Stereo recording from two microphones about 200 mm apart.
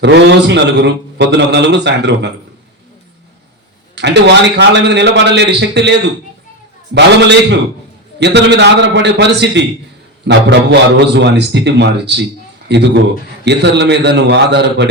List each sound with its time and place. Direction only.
0.0 s a man's voice: 60° right (ahead or behind)
3.9 s a man's voice: 60° right (ahead or behind)